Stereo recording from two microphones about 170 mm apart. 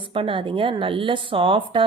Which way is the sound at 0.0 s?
30° right (ahead or behind).